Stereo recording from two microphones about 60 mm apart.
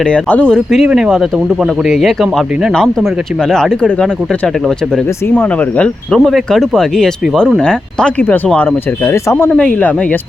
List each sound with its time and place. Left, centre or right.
0.0 s speech: centre
0.9 s speech: centre
3.5 s speech: centre
5.3 s speech: left
6.1 s speech: centre
8.5 s speech: left